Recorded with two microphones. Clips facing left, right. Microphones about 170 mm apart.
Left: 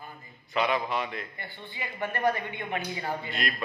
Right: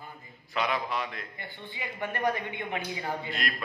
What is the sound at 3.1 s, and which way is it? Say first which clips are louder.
Speech: left 1 dB; centre (ahead or behind).